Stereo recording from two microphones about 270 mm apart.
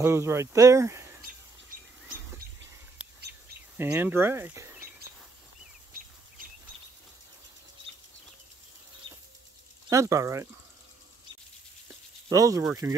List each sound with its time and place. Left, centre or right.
0.0 s speech: centre
3.7 s speech: centre
9.0 s a sound: centre
9.8 s speech: centre
12.3 s speech: centre